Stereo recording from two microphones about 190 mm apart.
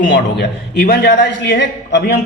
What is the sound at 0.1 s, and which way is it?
A woman's voice, 60° left (ahead or behind).